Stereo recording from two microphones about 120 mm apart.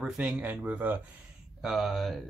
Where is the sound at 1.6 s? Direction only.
Centre (ahead or behind).